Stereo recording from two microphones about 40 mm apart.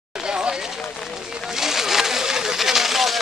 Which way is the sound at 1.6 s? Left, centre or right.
Centre.